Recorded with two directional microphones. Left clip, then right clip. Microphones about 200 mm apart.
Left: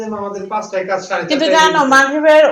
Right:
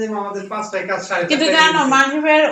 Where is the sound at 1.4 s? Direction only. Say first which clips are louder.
Left 3 dB; 15° left (ahead or behind).